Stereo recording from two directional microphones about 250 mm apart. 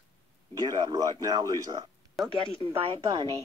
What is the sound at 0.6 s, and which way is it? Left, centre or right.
Speech, centre.